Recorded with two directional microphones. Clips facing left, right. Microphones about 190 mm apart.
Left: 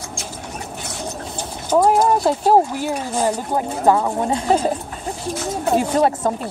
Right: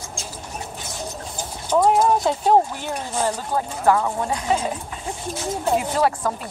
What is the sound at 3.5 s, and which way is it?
Speech, 20° left (ahead or behind).